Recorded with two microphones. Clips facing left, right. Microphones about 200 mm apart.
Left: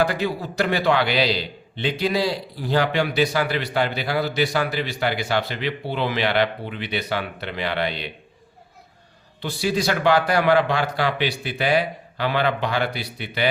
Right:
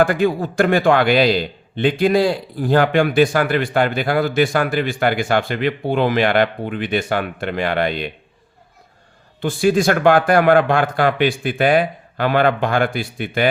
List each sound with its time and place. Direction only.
0.0 s a man's voice: 50° right (ahead or behind)
9.4 s a man's voice: 50° right (ahead or behind)